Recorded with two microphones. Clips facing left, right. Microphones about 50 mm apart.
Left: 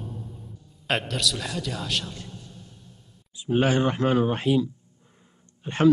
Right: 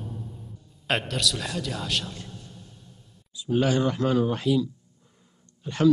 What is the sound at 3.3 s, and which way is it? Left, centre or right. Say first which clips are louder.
A man's voice: left 1 dB; left.